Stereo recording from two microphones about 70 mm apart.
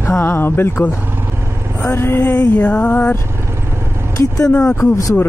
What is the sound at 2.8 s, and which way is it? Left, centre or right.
Speech, left.